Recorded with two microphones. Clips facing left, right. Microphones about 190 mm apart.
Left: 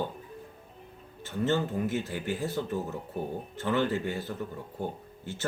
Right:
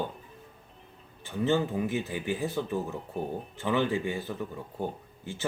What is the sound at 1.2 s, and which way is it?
Speech, 15° right (ahead or behind).